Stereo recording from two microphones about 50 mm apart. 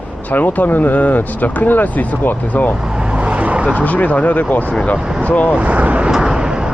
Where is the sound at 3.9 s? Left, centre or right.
Left.